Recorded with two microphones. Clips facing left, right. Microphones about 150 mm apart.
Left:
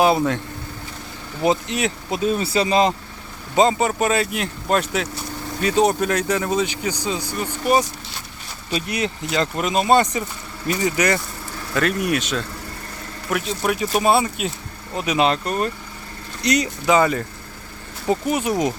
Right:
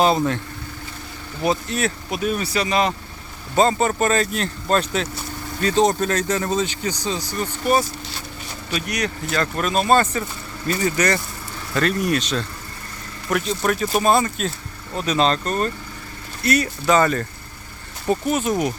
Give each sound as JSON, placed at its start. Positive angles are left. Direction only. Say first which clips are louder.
{"t": 0.0, "sound": "speech", "louder": "left 1 dB", "side_deg": 10}
{"t": 1.4, "sound": "speech", "louder": "left 2 dB", "side_deg": 20}
{"t": 3.5, "sound": "speech", "louder": "left 1 dB", "side_deg": 15}
{"t": 8.7, "sound": "speech", "louder": "left 1 dB", "side_deg": 25}
{"t": 13.3, "sound": "speech", "louder": "right 1 dB", "side_deg": 5}